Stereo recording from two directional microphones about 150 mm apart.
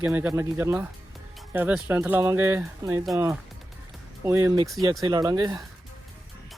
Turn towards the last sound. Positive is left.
turn(degrees=-25)  # may be behind; listen again after turning